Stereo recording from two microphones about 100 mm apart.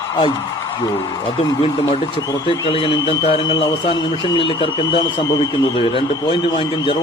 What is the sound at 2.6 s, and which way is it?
Speech, 60° left (ahead or behind).